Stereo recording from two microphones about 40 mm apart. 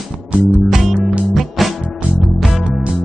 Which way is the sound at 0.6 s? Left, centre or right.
Centre.